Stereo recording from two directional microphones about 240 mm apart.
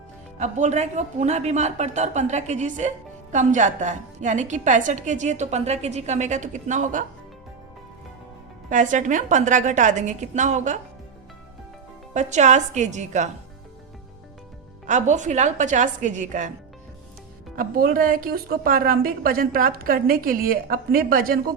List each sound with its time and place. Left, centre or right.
0.3 s a woman's voice: right
8.7 s a woman's voice: right
12.1 s speech: right
14.8 s a woman's voice: right
17.6 s a woman's voice: right